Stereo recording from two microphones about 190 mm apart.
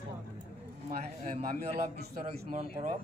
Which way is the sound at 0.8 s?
35° right (ahead or behind).